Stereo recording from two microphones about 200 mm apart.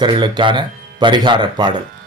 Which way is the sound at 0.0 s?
20° right (ahead or behind).